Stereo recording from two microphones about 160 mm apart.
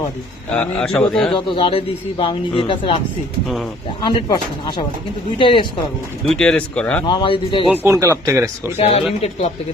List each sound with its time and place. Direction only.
0.5 s a man's voice: 5° left (ahead or behind)
1.3 s a man's voice: 30° left (ahead or behind)
4.0 s a man's voice: 25° left (ahead or behind)
6.2 s a man's voice: 5° left (ahead or behind)
7.1 s a man's voice: 30° left (ahead or behind)
7.9 s speech: 20° right (ahead or behind)
8.8 s a man's voice: 40° left (ahead or behind)